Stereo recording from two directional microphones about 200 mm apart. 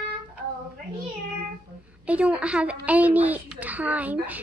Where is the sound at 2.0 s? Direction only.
5° right (ahead or behind).